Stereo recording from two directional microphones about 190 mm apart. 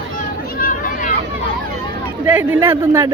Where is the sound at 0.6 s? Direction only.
50° left (ahead or behind).